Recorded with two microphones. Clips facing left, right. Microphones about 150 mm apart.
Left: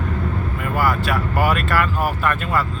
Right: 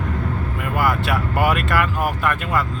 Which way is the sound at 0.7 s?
20° right (ahead or behind).